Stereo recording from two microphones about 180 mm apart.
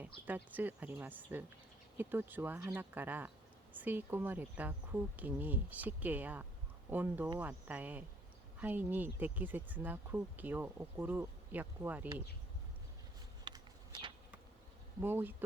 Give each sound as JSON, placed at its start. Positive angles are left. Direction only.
{"t": 0.0, "sound": "speech", "side_deg": -10}
{"t": 13.4, "sound": "a sound", "side_deg": -25}
{"t": 15.0, "sound": "speech", "side_deg": -10}